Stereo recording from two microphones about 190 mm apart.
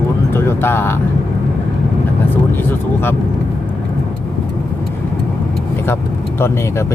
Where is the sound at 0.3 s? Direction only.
10° left (ahead or behind).